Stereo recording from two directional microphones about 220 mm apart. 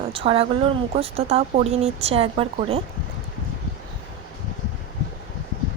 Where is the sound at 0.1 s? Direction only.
25° right (ahead or behind).